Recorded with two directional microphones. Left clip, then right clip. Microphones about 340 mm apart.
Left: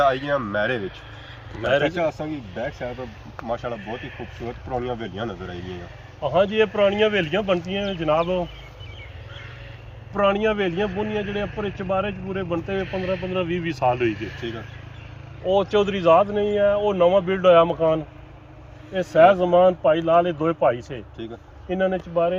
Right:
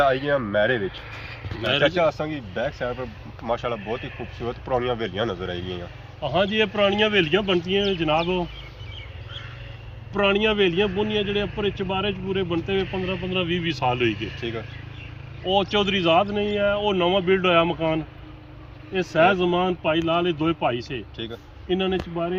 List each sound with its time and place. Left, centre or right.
0.0 s speech: centre
6.2 s speech: centre
10.1 s speech: centre
15.4 s speech: centre